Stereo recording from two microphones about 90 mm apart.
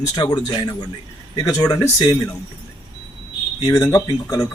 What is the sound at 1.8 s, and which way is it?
Speech, 40° left (ahead or behind).